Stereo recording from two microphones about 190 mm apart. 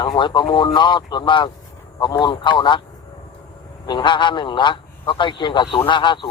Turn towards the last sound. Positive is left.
turn(degrees=25)  # may be behind; listen again after turning